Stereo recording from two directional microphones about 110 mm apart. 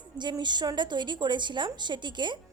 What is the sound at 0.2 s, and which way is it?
A woman's voice, 40° right (ahead or behind).